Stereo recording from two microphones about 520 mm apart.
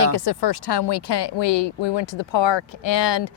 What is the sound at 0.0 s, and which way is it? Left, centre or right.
Speech, left.